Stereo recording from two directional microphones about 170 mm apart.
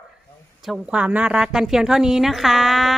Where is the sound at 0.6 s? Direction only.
5° right (ahead or behind).